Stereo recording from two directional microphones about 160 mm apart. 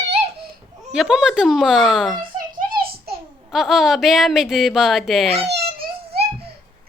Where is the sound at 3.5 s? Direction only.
Centre (ahead or behind).